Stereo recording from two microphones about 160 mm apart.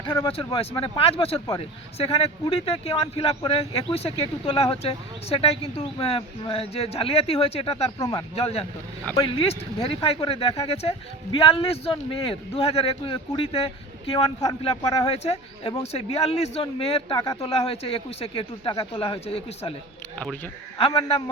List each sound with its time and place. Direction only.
0.3 s speech: 35° left (ahead or behind)
7.9 s speech: 25° left (ahead or behind)
8.4 s speech: 40° left (ahead or behind)
20.7 s speech: 35° left (ahead or behind)